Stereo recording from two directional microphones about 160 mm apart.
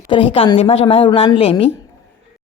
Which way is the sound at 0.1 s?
35° left (ahead or behind).